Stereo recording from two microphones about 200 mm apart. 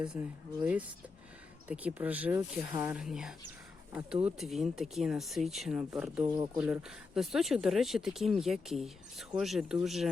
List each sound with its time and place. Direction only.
0.6 s speech: 5° right (ahead or behind)
6.2 s speech: 20° right (ahead or behind)
6.6 s speech: 5° right (ahead or behind)